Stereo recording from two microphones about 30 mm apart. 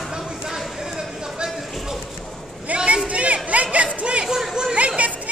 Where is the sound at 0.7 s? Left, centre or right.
Right.